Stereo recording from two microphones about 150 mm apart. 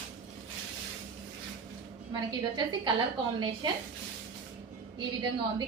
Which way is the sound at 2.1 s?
30° right (ahead or behind).